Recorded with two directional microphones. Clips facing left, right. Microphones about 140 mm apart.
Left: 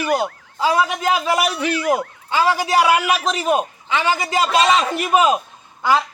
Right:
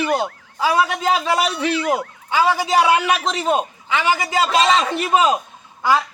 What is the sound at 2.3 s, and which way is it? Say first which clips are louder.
Speech: even; 15° right (ahead or behind).